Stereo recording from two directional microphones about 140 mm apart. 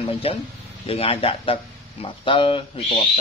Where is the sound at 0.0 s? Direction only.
45° left (ahead or behind).